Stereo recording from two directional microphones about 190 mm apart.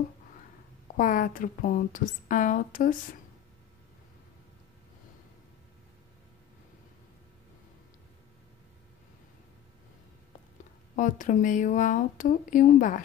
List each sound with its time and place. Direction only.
0.9 s a woman's voice: 45° left (ahead or behind)
11.0 s a woman's voice: 40° left (ahead or behind)